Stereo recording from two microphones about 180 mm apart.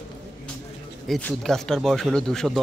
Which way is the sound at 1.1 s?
Centre (ahead or behind).